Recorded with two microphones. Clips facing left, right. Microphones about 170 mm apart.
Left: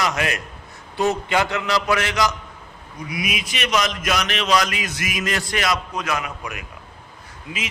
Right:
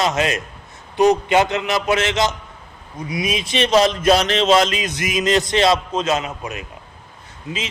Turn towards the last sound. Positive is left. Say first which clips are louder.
# right 4 dB
turn(degrees=-25)  # may be behind; listen again after turning